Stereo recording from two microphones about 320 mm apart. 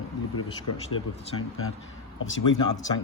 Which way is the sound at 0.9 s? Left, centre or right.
Left.